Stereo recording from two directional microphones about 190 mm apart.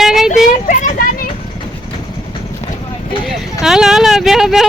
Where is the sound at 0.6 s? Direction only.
45° left (ahead or behind).